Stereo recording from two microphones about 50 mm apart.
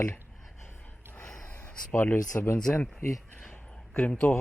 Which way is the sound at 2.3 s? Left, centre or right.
Left.